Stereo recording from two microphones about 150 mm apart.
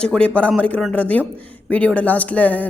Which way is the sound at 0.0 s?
5° left (ahead or behind).